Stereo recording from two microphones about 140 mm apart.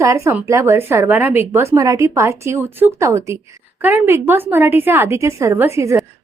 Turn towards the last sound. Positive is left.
turn(degrees=-20)  # may be behind; listen again after turning